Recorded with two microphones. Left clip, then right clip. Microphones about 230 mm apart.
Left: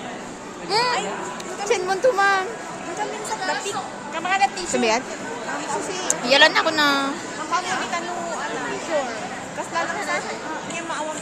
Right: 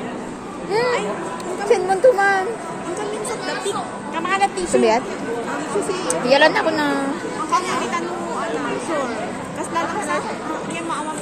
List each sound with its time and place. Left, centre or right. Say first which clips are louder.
0.7 s a child's voice: right 2 dB; centre
4.2 s speech: right 1 dB; centre